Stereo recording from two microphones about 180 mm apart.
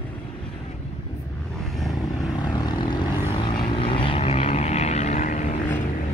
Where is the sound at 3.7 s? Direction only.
30° left (ahead or behind).